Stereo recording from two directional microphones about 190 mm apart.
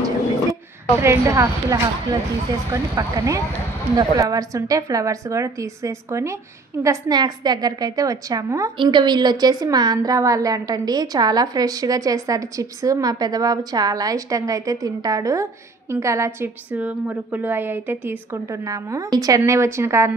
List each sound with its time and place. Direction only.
0.5 s a woman's voice: 15° right (ahead or behind)